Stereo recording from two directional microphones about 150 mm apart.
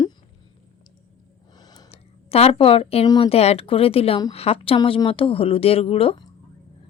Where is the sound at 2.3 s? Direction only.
40° left (ahead or behind).